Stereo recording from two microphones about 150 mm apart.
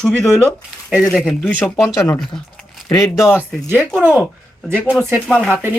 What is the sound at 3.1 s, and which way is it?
Speech, 20° left (ahead or behind).